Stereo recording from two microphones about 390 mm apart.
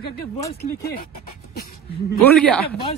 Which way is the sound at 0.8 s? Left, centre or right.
Left.